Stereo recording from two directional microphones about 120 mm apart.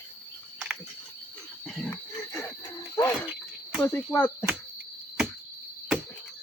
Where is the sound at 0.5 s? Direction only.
10° right (ahead or behind).